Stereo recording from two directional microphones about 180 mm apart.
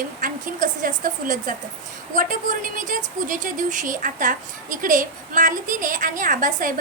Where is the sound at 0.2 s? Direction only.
50° right (ahead or behind).